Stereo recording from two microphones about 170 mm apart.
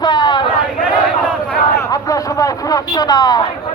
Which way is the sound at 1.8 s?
20° left (ahead or behind).